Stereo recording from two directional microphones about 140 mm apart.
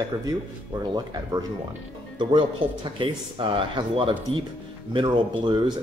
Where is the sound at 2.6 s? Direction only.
35° right (ahead or behind).